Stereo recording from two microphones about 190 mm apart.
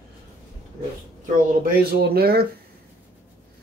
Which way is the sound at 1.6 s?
55° right (ahead or behind).